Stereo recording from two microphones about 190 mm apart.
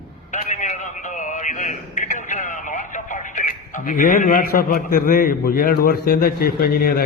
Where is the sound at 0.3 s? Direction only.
40° left (ahead or behind).